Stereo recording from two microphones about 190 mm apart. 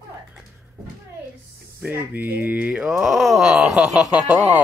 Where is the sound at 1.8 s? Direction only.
10° right (ahead or behind).